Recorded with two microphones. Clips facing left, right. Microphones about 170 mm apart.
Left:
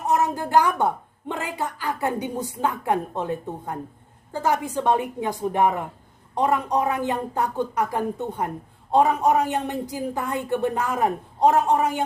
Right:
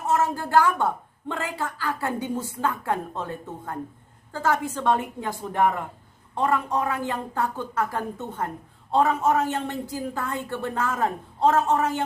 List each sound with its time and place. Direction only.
0.0 s a woman's voice: 15° left (ahead or behind)